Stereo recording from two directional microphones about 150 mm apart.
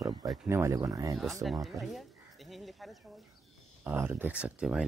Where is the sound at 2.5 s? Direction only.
Centre (ahead or behind).